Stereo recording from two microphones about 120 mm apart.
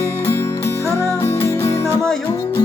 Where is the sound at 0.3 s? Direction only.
25° left (ahead or behind).